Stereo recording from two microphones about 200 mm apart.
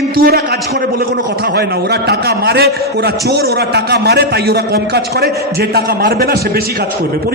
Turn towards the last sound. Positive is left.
turn(degrees=-50)  # may be behind; listen again after turning